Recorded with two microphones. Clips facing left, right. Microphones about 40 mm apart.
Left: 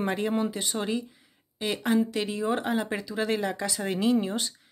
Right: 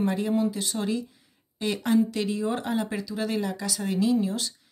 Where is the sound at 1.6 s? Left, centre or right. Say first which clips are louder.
Right 2 dB; centre.